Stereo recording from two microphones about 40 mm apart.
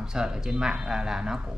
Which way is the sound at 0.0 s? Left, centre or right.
Centre.